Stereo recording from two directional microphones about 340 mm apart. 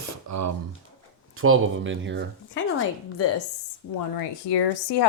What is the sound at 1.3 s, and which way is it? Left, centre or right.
Speech, right.